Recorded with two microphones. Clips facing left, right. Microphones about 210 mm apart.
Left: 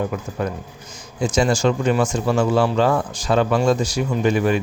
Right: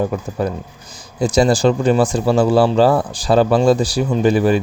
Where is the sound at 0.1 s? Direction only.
35° right (ahead or behind).